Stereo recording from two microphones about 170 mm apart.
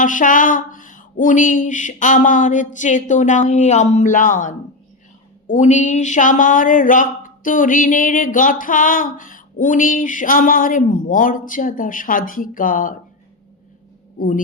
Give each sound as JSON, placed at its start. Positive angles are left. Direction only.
{"t": 0.0, "sound": "speech", "side_deg": 50}
{"t": 14.2, "sound": "speech", "side_deg": 50}